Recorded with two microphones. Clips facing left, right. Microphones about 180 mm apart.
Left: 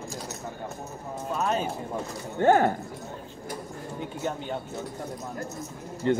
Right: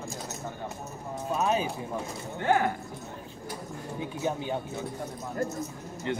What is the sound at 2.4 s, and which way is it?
Speech, 45° left (ahead or behind).